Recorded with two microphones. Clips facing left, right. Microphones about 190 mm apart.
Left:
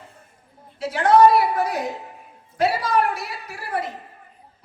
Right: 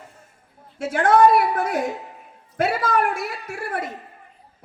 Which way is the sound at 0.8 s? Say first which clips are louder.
Left 1 dB; 50° right (ahead or behind).